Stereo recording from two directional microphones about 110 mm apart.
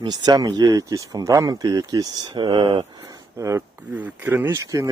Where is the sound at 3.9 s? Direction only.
15° right (ahead or behind).